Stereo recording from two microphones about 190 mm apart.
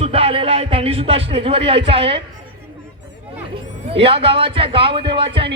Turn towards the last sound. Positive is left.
turn(degrees=-30)  # may be behind; listen again after turning